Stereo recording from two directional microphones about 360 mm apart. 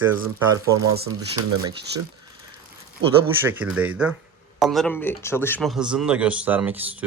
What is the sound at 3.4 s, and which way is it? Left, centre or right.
Speech, centre.